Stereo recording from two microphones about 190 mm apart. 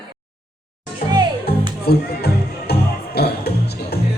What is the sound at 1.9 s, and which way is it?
Music, 55° left (ahead or behind).